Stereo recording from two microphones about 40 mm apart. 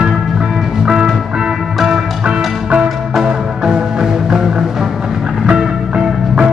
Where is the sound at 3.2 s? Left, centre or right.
Centre.